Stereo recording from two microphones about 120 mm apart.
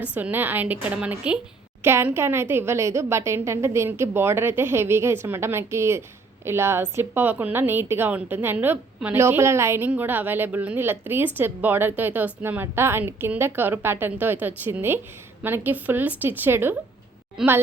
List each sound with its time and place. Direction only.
0.1 s a woman's voice: 15° right (ahead or behind)
17.4 s a woman's voice: 5° right (ahead or behind)